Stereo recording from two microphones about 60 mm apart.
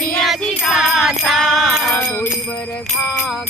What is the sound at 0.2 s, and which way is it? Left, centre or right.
Music, centre.